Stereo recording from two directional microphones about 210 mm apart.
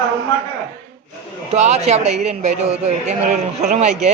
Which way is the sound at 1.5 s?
30° right (ahead or behind).